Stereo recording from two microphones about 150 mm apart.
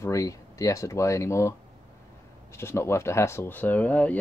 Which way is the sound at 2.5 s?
15° left (ahead or behind).